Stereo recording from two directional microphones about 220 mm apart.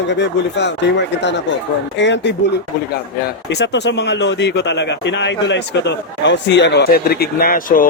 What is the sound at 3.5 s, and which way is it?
Speech, 50° left (ahead or behind).